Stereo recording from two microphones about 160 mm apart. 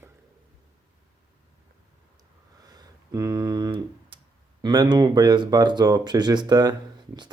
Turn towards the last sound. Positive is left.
turn(degrees=-25)  # may be behind; listen again after turning